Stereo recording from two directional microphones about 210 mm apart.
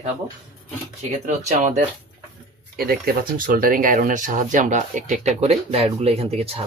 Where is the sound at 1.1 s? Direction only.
35° right (ahead or behind).